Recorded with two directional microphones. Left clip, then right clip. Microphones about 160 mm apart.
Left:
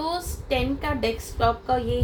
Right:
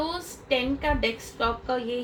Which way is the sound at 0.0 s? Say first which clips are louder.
Left 3 dB; 40° left (ahead or behind).